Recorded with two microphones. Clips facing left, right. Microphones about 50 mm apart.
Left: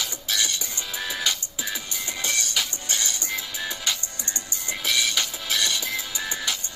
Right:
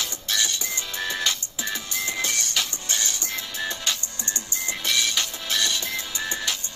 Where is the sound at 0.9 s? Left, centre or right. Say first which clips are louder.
Even; centre.